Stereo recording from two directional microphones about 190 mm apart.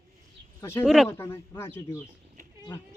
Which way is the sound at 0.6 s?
15° left (ahead or behind).